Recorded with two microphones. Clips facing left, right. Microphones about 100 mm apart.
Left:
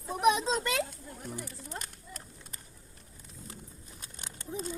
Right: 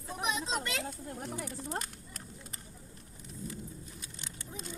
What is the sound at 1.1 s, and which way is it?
Speech, 70° right (ahead or behind).